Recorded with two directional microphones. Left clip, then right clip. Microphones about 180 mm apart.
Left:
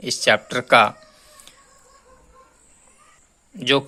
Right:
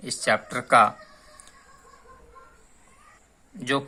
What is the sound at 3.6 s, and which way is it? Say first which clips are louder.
Speech: left 7 dB; 30° left (ahead or behind).